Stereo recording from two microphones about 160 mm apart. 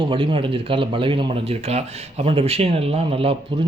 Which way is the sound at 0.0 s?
30° right (ahead or behind).